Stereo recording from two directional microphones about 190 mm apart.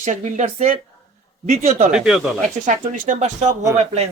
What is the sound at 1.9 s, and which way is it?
Speech, 5° right (ahead or behind).